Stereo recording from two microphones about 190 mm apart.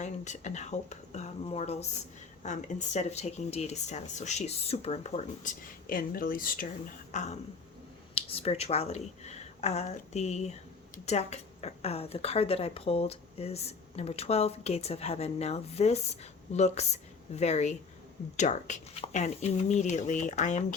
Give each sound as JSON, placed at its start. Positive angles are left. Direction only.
{"t": 0.0, "sound": "a woman's voice", "side_deg": 40}